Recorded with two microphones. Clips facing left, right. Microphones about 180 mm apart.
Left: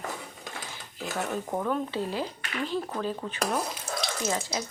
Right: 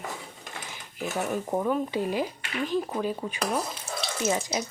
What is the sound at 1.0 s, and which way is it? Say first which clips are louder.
Speech: right 2 dB; 10° right (ahead or behind).